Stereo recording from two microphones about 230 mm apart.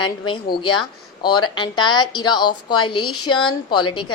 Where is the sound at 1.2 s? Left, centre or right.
Centre.